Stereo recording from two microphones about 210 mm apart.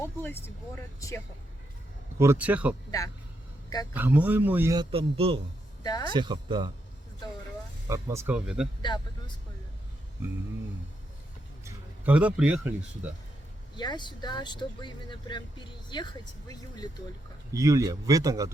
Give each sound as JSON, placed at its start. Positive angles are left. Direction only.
{"t": 0.2, "sound": "speech", "side_deg": 10}
{"t": 2.1, "sound": "a man's voice", "side_deg": -10}
{"t": 3.9, "sound": "a man's voice", "side_deg": -10}
{"t": 5.8, "sound": "speech", "side_deg": 20}
{"t": 6.1, "sound": "speech", "side_deg": -20}
{"t": 7.9, "sound": "a man's voice", "side_deg": -15}
{"t": 8.8, "sound": "speech", "side_deg": 20}
{"t": 11.6, "sound": "speech", "side_deg": -5}
{"t": 13.7, "sound": "speech", "side_deg": 20}
{"t": 17.5, "sound": "a man's voice", "side_deg": -15}